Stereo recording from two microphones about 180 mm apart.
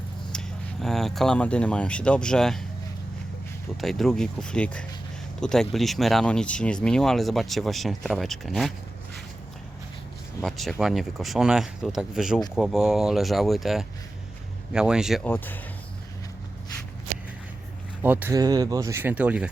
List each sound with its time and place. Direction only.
0.3 s speech: centre (ahead or behind)
3.8 s speech: centre (ahead or behind)
10.4 s speech: centre (ahead or behind)
15.2 s speech: 10° left (ahead or behind)
18.0 s speech: 10° right (ahead or behind)
18.3 s speech: 20° right (ahead or behind)